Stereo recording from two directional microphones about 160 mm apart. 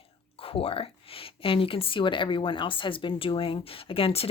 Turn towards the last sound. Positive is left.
turn(degrees=35)  # may be behind; listen again after turning